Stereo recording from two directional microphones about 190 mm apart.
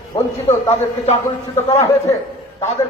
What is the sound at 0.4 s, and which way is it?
Speech, 30° left (ahead or behind).